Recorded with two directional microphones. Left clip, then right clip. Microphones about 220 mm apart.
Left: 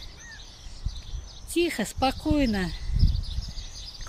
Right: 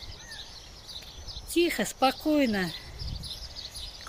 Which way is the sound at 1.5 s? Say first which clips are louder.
Even; 20° left (ahead or behind).